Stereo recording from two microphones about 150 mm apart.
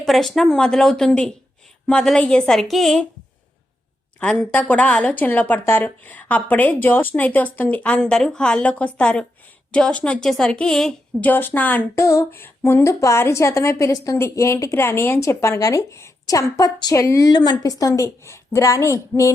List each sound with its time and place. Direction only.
0.0 s speech: centre (ahead or behind)
4.2 s a woman's voice: 10° left (ahead or behind)